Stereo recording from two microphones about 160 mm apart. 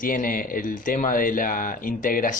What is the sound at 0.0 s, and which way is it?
Speech, 60° left (ahead or behind).